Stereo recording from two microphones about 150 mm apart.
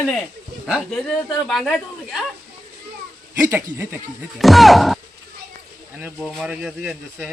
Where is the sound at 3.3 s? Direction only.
15° right (ahead or behind).